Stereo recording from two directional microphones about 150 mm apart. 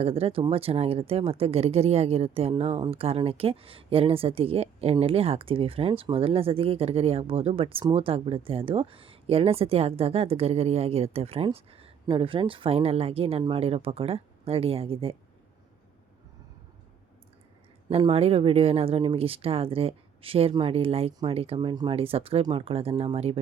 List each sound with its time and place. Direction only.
0.0 s speech: 40° right (ahead or behind)
17.8 s speech: 40° right (ahead or behind)